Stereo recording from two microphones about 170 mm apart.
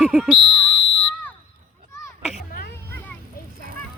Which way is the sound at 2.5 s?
60° left (ahead or behind).